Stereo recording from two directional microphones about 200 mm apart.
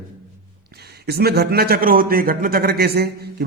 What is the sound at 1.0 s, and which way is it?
A man's voice, 55° right (ahead or behind).